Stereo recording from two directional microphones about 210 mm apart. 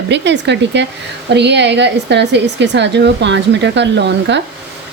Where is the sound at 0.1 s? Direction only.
55° right (ahead or behind).